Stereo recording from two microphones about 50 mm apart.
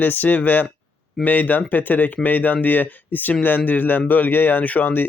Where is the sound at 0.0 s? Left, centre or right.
Left.